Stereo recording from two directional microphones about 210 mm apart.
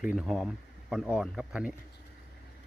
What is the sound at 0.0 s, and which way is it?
Speech, centre (ahead or behind).